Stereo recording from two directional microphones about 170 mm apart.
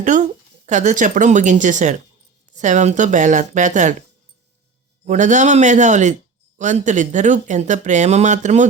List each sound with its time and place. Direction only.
0.0 s speech: 45° right (ahead or behind)
5.0 s speech: 45° right (ahead or behind)